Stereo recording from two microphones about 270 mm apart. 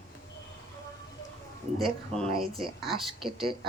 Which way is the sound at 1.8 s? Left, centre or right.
Centre.